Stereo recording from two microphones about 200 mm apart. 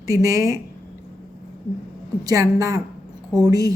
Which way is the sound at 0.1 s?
15° right (ahead or behind).